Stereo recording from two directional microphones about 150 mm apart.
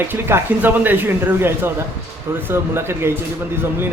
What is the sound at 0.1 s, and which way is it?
Speech, 15° right (ahead or behind).